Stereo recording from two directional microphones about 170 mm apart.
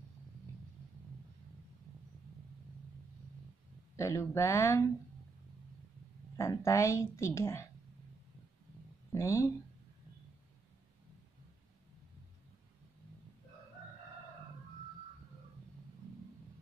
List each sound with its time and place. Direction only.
3.9 s a woman's voice: 15° left (ahead or behind)
6.3 s a woman's voice: 15° left (ahead or behind)
9.1 s speech: 15° left (ahead or behind)